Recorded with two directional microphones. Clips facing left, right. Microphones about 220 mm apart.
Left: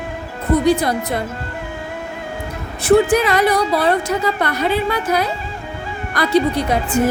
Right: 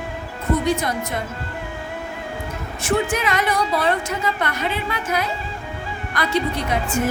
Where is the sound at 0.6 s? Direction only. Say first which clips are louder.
Left 6 dB; 35° left (ahead or behind).